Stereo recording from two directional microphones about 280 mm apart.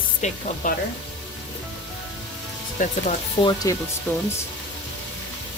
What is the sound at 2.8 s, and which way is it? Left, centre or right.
Speech, left.